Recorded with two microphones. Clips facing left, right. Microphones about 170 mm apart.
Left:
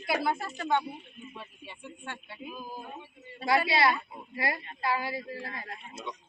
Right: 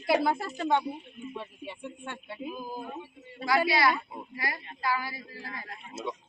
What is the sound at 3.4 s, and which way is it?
A woman's voice, 25° left (ahead or behind).